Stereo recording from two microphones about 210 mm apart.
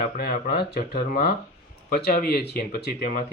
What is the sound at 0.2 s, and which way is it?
Speech, 45° left (ahead or behind).